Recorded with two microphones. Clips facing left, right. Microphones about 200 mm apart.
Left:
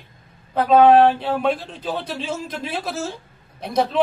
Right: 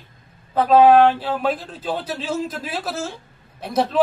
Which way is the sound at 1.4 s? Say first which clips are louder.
Left 1 dB; 5° right (ahead or behind).